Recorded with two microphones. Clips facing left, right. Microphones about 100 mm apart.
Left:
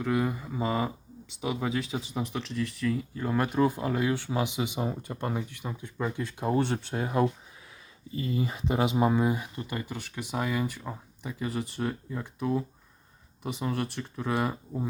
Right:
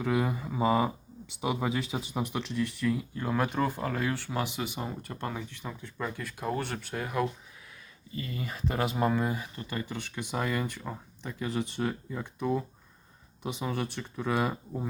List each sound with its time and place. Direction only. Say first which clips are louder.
0.0 s speech: left 1 dB; 5° right (ahead or behind)
3.6 s speech: left 4 dB; 15° left (ahead or behind)